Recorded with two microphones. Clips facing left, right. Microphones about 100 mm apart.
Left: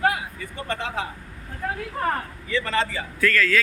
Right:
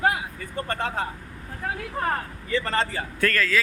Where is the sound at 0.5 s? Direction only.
45° right (ahead or behind).